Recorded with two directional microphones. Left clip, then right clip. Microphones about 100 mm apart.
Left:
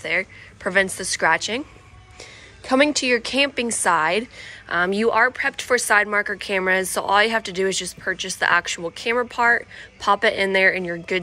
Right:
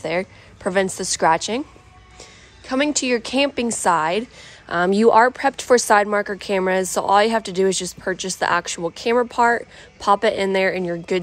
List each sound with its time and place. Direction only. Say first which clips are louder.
0.0 s a woman's voice: even; 45° right (ahead or behind)
2.6 s a woman's voice: left 4 dB; 15° right (ahead or behind)
2.9 s speech: even; 35° right (ahead or behind); by 6.0 s 50° right (ahead or behind)
6.1 s speech: right 1 dB; 40° right (ahead or behind)